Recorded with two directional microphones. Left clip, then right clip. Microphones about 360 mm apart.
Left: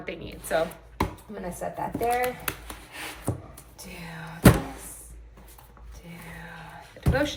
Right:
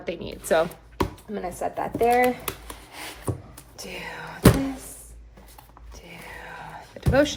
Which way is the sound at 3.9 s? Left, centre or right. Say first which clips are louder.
Right 5 dB; centre.